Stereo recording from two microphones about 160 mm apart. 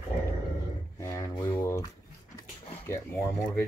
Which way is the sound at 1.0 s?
20° left (ahead or behind).